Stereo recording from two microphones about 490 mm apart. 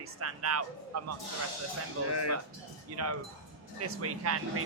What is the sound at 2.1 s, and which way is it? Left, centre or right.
Speech, left.